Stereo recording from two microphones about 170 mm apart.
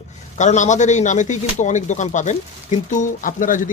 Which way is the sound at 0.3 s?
45° left (ahead or behind).